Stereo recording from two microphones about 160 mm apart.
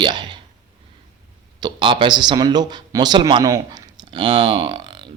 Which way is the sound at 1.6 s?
30° right (ahead or behind).